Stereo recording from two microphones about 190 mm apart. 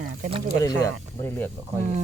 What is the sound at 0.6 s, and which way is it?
Speech, 15° left (ahead or behind).